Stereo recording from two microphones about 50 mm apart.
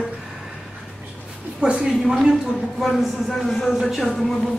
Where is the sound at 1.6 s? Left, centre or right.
Right.